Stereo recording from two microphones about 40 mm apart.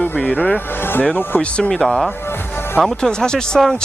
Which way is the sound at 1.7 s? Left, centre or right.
Centre.